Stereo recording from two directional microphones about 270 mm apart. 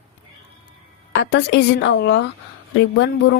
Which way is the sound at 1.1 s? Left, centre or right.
Left.